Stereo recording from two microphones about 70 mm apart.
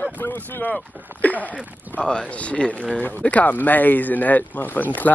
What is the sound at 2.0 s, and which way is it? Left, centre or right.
Speech, centre.